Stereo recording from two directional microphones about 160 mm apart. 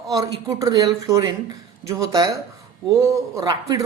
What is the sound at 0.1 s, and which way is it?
Speech, 20° right (ahead or behind).